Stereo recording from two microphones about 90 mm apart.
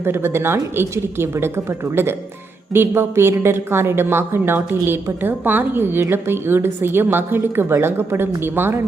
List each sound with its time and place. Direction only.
0.0 s a woman's voice: 30° right (ahead or behind)